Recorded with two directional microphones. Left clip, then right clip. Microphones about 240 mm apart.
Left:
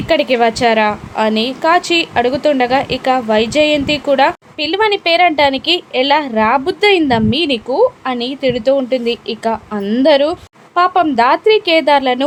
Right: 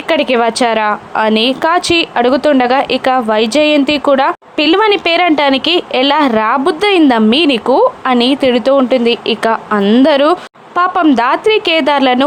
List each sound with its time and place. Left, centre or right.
0.1 s a woman's voice: centre